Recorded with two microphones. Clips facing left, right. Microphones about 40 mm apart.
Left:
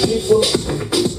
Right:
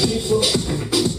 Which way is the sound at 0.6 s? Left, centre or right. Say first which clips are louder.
Left 2 dB; centre.